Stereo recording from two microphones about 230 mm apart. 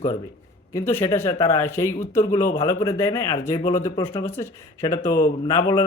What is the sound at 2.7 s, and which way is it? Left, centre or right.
Speech, centre.